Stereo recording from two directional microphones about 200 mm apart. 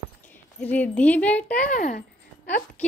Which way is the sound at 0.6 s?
5° left (ahead or behind).